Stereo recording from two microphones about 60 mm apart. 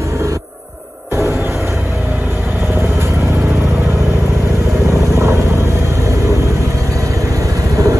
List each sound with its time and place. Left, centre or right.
5.1 s vehicle: right
7.7 s vehicle: right